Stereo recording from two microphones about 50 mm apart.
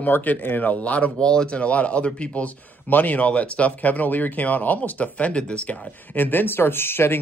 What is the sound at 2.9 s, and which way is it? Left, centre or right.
Speech, left.